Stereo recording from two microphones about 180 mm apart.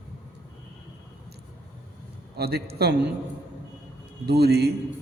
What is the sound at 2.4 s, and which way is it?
Speech, 60° right (ahead or behind).